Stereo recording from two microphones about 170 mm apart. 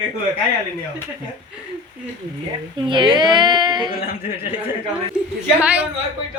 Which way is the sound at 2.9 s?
30° right (ahead or behind).